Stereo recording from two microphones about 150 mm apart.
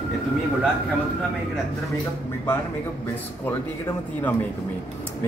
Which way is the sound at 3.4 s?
10° left (ahead or behind).